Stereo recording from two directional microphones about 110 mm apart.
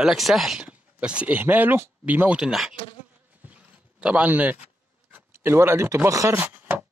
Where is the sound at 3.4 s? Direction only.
10° right (ahead or behind).